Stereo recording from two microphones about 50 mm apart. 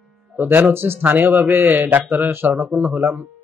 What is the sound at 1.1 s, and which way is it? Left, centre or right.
A man's voice, right.